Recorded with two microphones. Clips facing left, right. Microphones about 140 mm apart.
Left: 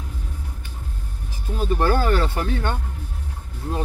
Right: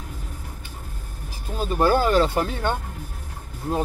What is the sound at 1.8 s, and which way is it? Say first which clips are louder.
Speech: right 4 dB; 15° right (ahead or behind).